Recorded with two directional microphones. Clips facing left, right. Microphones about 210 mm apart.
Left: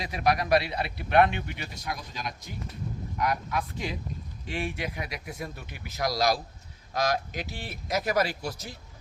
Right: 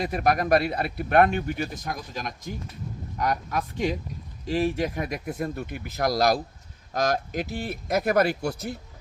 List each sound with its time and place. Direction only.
0.0 s speech: 50° right (ahead or behind)